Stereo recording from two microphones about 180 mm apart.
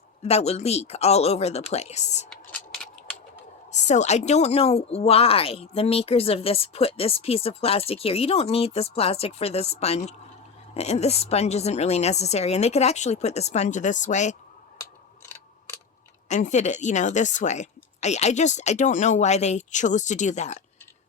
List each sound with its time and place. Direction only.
0.2 s a woman's voice: 35° left (ahead or behind)
2.3 s a sound: 5° left (ahead or behind)
3.7 s a woman's voice: 40° left (ahead or behind)
16.3 s a woman's voice: 40° left (ahead or behind)